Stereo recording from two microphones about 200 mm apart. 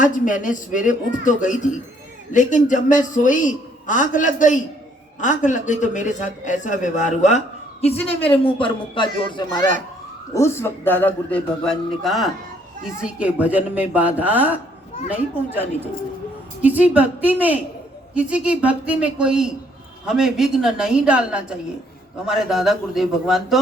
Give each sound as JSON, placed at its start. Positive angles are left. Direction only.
{"t": 0.0, "sound": "a man's voice", "side_deg": 40}